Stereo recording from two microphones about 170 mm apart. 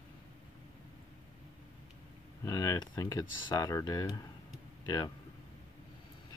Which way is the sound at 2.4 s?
20° left (ahead or behind).